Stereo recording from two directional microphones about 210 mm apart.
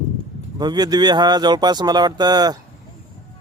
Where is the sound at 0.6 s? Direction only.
20° right (ahead or behind).